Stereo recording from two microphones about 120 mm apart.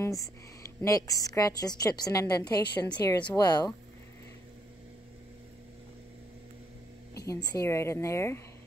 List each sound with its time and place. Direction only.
0.0 s a woman's voice: 25° left (ahead or behind)
7.2 s a woman's voice: 30° left (ahead or behind)